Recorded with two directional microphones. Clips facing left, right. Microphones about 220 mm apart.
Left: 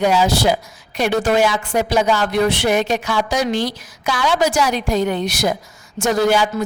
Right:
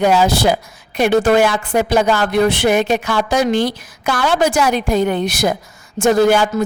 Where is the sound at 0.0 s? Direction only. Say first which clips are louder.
Right 2 dB; 55° right (ahead or behind).